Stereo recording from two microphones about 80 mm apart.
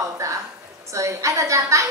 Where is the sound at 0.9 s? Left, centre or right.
Right.